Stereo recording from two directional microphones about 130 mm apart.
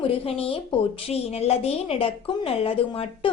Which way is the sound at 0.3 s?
45° left (ahead or behind).